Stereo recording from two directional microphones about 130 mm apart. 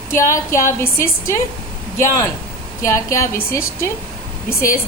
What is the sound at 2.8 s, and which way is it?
A woman's voice, 25° left (ahead or behind).